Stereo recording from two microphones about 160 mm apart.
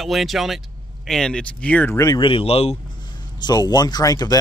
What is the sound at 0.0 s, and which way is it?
Speech, centre (ahead or behind).